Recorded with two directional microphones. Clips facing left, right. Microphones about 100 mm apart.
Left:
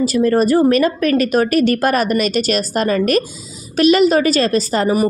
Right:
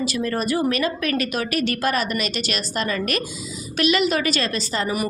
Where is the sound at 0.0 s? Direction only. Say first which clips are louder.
Left 10 dB; 40° left (ahead or behind).